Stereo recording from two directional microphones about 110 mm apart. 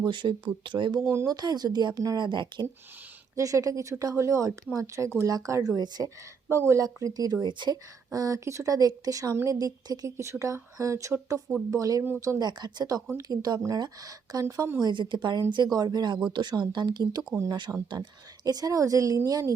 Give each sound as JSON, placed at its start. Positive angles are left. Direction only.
{"t": 0.0, "sound": "speech", "side_deg": -45}
{"t": 1.0, "sound": "speech", "side_deg": -25}
{"t": 3.3, "sound": "a woman's voice", "side_deg": -30}
{"t": 6.5, "sound": "speech", "side_deg": -25}